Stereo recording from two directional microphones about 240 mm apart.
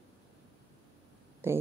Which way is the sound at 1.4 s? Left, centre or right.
Centre.